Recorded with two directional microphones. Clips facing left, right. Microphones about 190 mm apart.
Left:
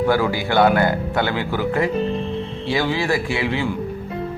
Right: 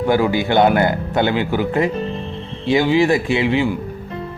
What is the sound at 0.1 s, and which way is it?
Speech, 20° right (ahead or behind).